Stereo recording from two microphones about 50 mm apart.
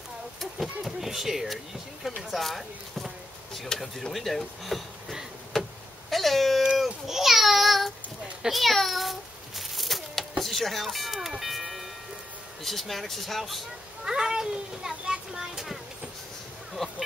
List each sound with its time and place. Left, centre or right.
0.4 s speech: centre
3.6 s speech: centre
3.9 s speech: centre
5.5 s vehicle: centre
7.1 s a sound: centre
12.6 s speech: centre
14.0 s a child's voice: centre
16.8 s a sound: centre